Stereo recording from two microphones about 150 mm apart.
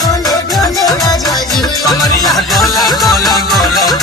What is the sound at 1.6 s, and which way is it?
Music, 25° left (ahead or behind).